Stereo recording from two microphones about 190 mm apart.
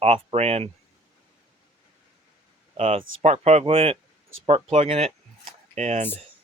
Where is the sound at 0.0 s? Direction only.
30° right (ahead or behind).